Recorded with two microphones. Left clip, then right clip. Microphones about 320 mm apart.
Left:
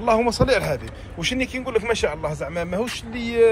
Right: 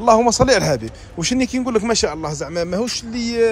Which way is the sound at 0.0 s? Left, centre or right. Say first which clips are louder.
Right 6 dB; centre.